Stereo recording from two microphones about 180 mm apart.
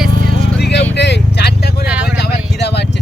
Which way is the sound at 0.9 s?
70° left (ahead or behind).